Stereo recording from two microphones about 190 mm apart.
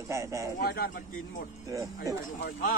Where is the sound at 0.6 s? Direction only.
55° left (ahead or behind).